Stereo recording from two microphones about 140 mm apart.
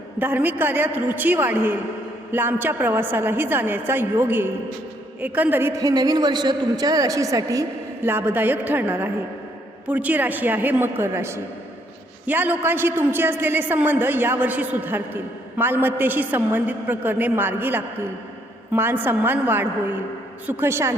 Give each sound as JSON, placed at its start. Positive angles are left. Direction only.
{"t": 0.2, "sound": "a woman's voice", "side_deg": -15}